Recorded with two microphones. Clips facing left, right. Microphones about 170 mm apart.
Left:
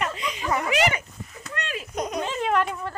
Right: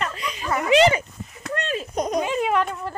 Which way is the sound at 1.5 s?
30° right (ahead or behind).